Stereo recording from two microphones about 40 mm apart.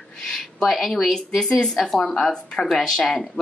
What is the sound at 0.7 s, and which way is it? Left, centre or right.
Speech, centre.